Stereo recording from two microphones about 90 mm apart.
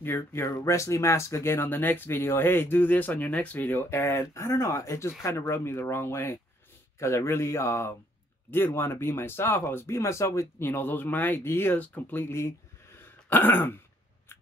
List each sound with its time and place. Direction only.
0.0 s speech: 25° left (ahead or behind)